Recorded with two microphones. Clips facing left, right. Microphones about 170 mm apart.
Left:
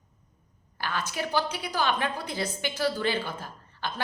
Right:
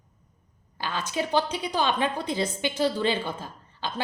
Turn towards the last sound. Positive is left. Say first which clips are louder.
# right 2 dB
turn(degrees=-15)  # may be behind; listen again after turning